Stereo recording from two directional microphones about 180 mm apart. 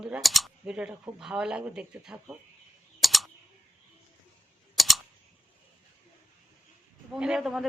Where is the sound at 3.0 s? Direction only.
Centre (ahead or behind).